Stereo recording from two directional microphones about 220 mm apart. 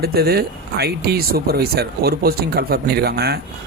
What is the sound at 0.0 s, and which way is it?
Speech, 45° right (ahead or behind).